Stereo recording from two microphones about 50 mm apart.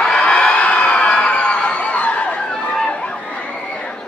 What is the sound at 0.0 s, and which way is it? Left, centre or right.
Crowd, centre.